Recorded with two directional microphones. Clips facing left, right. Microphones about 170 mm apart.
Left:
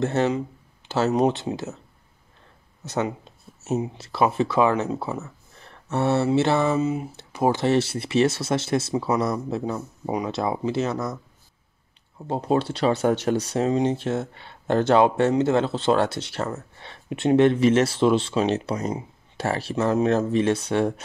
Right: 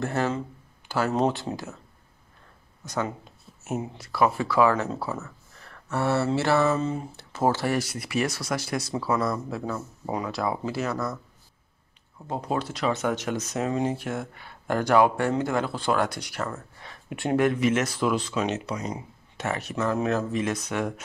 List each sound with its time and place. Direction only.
0.0 s speech: 20° left (ahead or behind)
2.8 s speech: 25° left (ahead or behind)
12.3 s speech: 30° left (ahead or behind)